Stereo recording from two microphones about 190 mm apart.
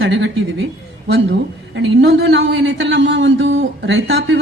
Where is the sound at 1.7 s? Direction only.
65° right (ahead or behind).